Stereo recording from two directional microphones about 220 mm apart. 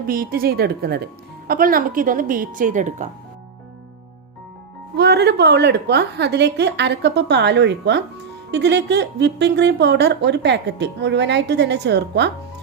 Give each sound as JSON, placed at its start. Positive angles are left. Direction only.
{"t": 0.1, "sound": "a woman's voice", "side_deg": -40}
{"t": 4.9, "sound": "speech", "side_deg": -50}